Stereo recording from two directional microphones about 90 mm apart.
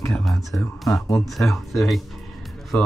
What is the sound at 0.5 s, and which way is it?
Speech, 15° left (ahead or behind).